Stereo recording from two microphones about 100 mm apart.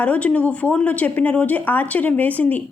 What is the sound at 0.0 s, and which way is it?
A woman's voice, 15° left (ahead or behind).